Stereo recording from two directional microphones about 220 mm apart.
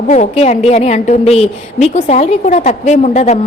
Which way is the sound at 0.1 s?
30° left (ahead or behind).